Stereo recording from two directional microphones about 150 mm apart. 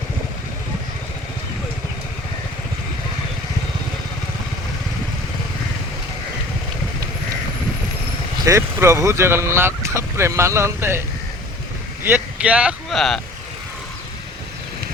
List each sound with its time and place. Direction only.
8.4 s speech: 20° right (ahead or behind)
12.0 s speech: 10° right (ahead or behind)